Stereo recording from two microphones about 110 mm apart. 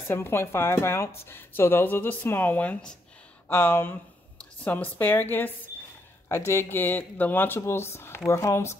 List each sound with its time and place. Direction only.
0.1 s speech: 20° left (ahead or behind)